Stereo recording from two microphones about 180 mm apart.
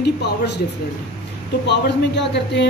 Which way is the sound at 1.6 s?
70° left (ahead or behind).